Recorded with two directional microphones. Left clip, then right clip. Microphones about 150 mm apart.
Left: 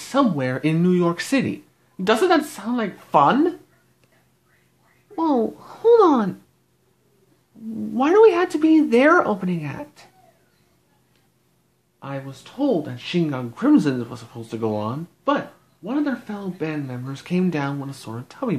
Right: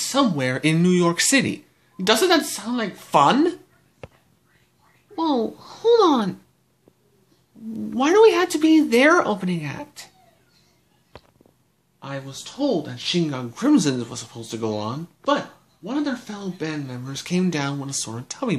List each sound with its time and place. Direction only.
0.1 s speech: 15° left (ahead or behind)
3.1 s speech: 5° left (ahead or behind)
5.1 s speech: 25° left (ahead or behind)
7.7 s speech: 10° left (ahead or behind)
12.0 s speech: 20° left (ahead or behind); by 18.6 s centre (ahead or behind)